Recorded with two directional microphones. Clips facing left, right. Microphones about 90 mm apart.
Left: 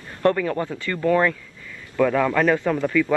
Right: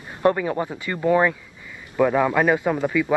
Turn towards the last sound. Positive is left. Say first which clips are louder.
# left 1 dB
turn(degrees=-15)  # may be behind; listen again after turning